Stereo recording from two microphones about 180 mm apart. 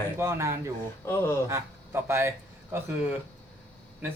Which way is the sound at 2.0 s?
15° right (ahead or behind).